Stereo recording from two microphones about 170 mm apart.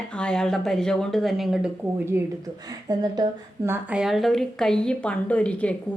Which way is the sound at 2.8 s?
25° right (ahead or behind).